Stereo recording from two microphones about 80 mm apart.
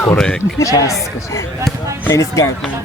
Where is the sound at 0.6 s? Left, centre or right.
Left.